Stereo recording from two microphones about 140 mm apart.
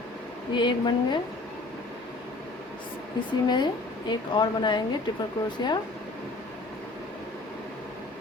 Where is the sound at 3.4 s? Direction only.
30° left (ahead or behind).